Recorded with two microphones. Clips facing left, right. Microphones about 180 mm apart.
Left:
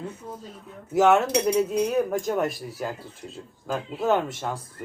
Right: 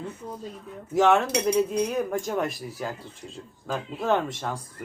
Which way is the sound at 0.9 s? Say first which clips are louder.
Left 2 dB; 5° left (ahead or behind).